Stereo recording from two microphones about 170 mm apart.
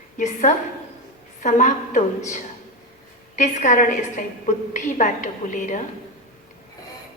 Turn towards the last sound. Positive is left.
turn(degrees=45)  # may be behind; listen again after turning